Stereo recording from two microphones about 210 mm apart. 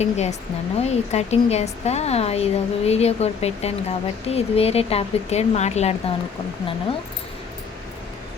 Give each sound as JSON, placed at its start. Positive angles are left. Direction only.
{"t": 0.0, "sound": "speech", "side_deg": 30}